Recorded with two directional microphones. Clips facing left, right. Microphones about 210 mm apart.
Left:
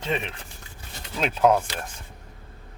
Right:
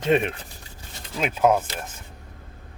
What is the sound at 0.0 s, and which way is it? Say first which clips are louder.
Speech: right 8 dB; 55° right (ahead or behind).